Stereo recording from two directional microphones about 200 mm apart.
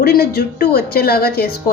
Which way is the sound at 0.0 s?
50° left (ahead or behind).